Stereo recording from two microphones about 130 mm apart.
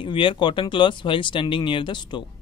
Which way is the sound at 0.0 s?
40° left (ahead or behind).